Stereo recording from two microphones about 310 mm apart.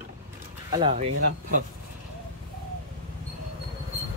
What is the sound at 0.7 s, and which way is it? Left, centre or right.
Speech, centre.